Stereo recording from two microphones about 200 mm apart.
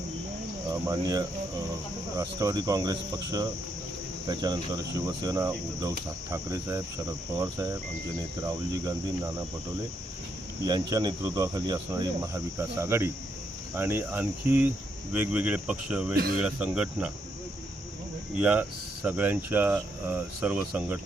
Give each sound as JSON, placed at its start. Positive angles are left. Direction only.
{"t": 0.7, "sound": "speech", "side_deg": -20}
{"t": 4.3, "sound": "cricket", "side_deg": -20}
{"t": 5.2, "sound": "speech", "side_deg": -15}
{"t": 10.7, "sound": "speech", "side_deg": -20}
{"t": 18.3, "sound": "speech", "side_deg": -5}